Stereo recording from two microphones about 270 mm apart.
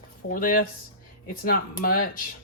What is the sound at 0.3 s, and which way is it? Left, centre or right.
Speech, left.